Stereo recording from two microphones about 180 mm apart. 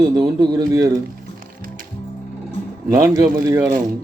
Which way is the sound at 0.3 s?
20° right (ahead or behind).